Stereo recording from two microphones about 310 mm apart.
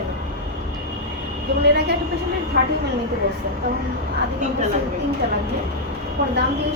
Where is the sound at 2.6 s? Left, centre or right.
Right.